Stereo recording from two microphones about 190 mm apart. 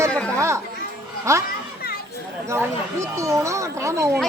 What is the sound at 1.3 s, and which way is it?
Speech, 15° right (ahead or behind).